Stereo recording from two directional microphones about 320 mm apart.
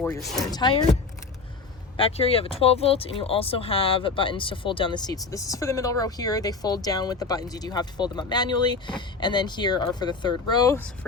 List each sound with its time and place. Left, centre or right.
0.0 s speech: centre
0.5 s speech: centre
2.0 s speech: centre